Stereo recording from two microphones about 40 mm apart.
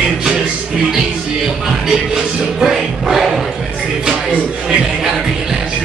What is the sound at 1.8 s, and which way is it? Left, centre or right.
Music, centre.